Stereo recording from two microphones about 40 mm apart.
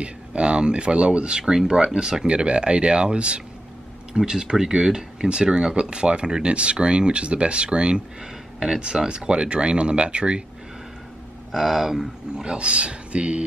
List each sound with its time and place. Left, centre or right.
0.0 s speech: right
1.4 s speech: centre
2.2 s speech: right
4.1 s speech: centre
11.5 s speech: centre
12.4 s speech: right